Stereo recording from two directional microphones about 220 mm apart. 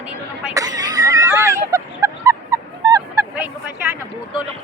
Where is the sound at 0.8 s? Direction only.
15° right (ahead or behind).